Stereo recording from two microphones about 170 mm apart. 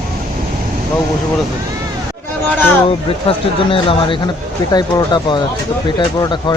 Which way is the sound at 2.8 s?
30° left (ahead or behind).